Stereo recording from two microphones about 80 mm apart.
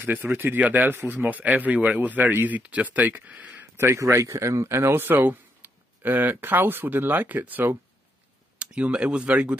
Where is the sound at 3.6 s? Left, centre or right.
Right.